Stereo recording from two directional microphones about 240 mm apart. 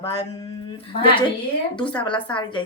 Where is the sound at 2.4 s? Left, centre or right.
Left.